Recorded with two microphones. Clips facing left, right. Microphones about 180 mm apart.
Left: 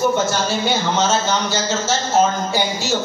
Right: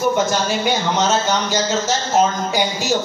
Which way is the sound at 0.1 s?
15° right (ahead or behind).